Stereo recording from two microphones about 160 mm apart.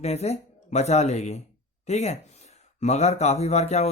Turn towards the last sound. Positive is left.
turn(degrees=45)  # may be behind; listen again after turning